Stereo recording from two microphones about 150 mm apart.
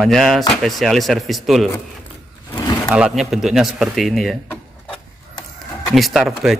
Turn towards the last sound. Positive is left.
turn(degrees=0)  # may be behind; listen again after turning